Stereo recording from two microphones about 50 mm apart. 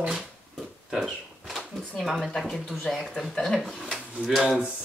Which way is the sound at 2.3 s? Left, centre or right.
Centre.